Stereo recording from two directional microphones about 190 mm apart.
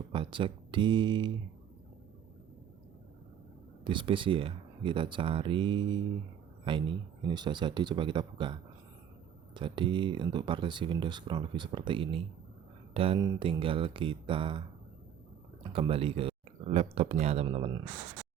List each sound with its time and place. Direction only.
0.1 s speech: 25° right (ahead or behind)
3.8 s speech: 25° right (ahead or behind)
9.6 s speech: 25° right (ahead or behind)
15.6 s speech: 30° right (ahead or behind)